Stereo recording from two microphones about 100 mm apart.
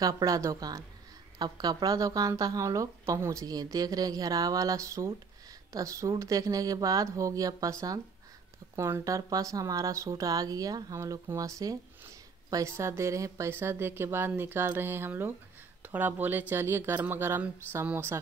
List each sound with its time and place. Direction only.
0.0 s a woman's voice: 35° right (ahead or behind)
8.7 s a woman's voice: 30° right (ahead or behind)